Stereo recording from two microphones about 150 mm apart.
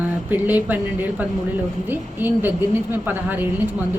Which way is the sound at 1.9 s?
15° right (ahead or behind).